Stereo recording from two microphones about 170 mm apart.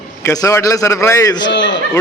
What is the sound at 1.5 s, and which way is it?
Speech, 90° left.